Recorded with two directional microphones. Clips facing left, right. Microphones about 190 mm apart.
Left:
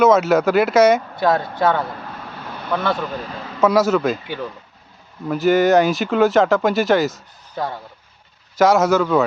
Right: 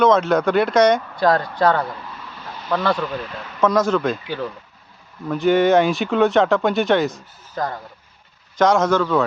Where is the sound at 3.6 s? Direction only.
5° left (ahead or behind).